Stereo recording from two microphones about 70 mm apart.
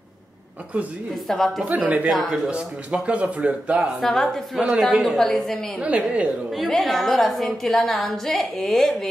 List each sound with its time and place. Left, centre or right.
1.2 s a woman's voice: centre
1.6 s speech: centre
2.0 s a woman's voice: centre
2.5 s a man's voice: centre
4.0 s a woman's voice: centre
4.6 s a man's voice: centre
5.8 s a man's voice: centre
6.5 s a woman's voice: centre